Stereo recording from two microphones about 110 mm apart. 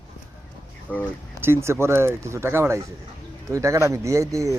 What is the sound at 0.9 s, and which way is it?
Speech, 15° right (ahead or behind).